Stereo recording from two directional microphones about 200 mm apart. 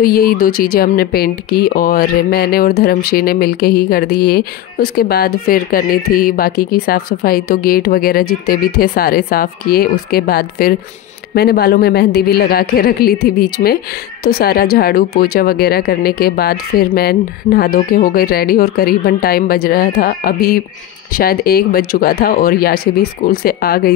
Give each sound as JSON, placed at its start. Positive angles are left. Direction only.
{"t": 0.0, "sound": "speech", "side_deg": 50}